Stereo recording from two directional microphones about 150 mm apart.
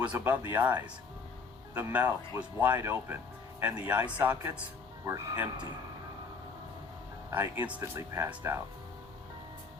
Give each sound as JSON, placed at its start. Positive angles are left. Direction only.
{"t": 0.1, "sound": "speech", "side_deg": -10}
{"t": 7.3, "sound": "speech", "side_deg": -15}